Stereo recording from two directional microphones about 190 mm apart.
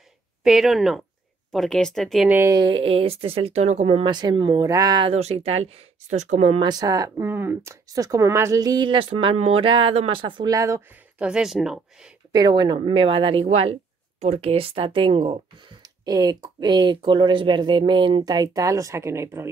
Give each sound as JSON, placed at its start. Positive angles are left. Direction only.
{"t": 0.4, "sound": "speech", "side_deg": 0}
{"t": 6.7, "sound": "speech", "side_deg": -20}
{"t": 11.2, "sound": "speech", "side_deg": -5}
{"t": 12.3, "sound": "speech", "side_deg": -20}